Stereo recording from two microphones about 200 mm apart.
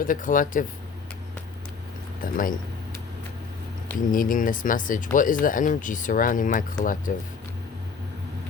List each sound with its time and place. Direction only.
0.0 s speech: 40° left (ahead or behind)
2.2 s speech: 45° left (ahead or behind)
3.9 s speech: 40° left (ahead or behind)